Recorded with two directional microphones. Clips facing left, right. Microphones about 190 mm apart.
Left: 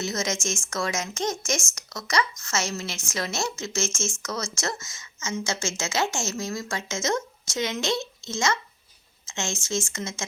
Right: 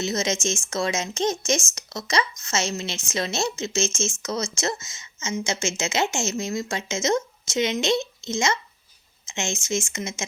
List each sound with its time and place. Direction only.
0.0 s a woman's voice: 20° right (ahead or behind)